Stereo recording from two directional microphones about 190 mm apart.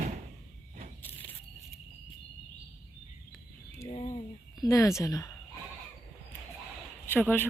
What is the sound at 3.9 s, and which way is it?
Bird, 30° left (ahead or behind).